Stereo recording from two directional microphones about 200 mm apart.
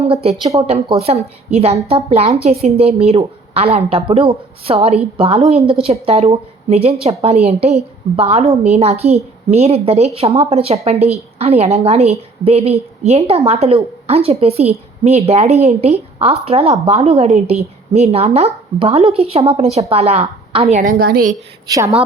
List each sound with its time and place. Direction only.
0.0 s a woman's voice: 30° right (ahead or behind); by 21.3 s 45° right (ahead or behind)
21.7 s a woman's voice: 15° right (ahead or behind)